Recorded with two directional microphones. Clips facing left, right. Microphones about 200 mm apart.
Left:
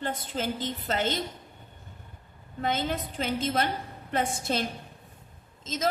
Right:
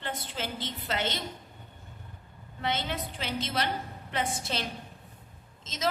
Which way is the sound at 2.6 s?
45° left (ahead or behind).